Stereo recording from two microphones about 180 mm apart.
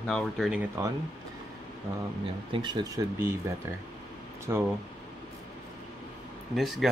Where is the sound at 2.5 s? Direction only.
25° right (ahead or behind).